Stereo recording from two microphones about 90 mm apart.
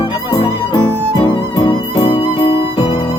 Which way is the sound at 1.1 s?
55° left (ahead or behind).